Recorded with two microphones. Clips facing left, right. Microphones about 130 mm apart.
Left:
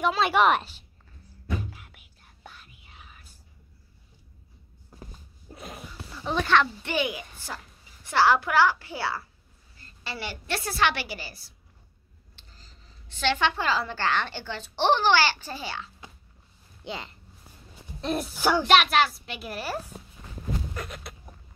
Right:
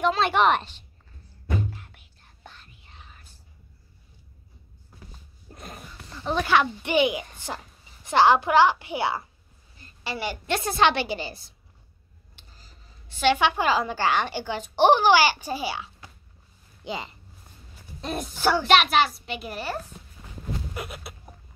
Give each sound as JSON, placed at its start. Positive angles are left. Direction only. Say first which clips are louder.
{"t": 0.0, "sound": "a child's voice", "louder": "right 1 dB", "side_deg": 5}
{"t": 1.6, "sound": "whispering", "louder": "right 7 dB", "side_deg": 10}
{"t": 5.5, "sound": "a sound", "louder": "left 1 dB", "side_deg": 5}
{"t": 7.3, "sound": "a woman's voice", "louder": "right 4 dB", "side_deg": -20}
{"t": 12.4, "sound": "a woman's voice", "louder": "right 1 dB", "side_deg": -10}
{"t": 18.7, "sound": "a child's voice", "louder": "right 1 dB", "side_deg": 0}
{"t": 20.7, "sound": "a sound", "louder": "right 1 dB", "side_deg": -10}